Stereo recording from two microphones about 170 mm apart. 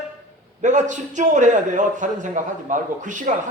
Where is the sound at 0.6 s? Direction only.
45° right (ahead or behind).